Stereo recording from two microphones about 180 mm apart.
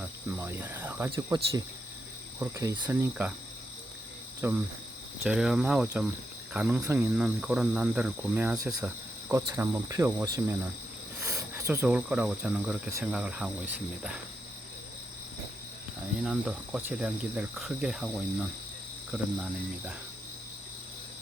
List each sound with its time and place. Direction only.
0.3 s speech: 10° right (ahead or behind)
4.4 s speech: 10° right (ahead or behind)
5.2 s insect: 5° right (ahead or behind)
6.5 s cricket: 5° right (ahead or behind)
6.7 s speech: 15° right (ahead or behind)
7.0 s speech: 5° right (ahead or behind)
11.2 s cricket: 15° right (ahead or behind)
11.7 s insect: 5° right (ahead or behind)
16.2 s insect: 5° right (ahead or behind)
19.1 s speech: 10° right (ahead or behind)